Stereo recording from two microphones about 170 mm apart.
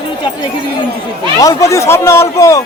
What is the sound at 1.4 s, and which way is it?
Speech, 20° left (ahead or behind).